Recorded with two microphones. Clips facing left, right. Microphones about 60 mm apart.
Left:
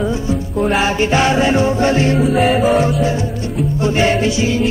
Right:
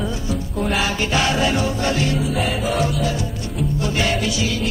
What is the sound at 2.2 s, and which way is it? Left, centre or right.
Music, left.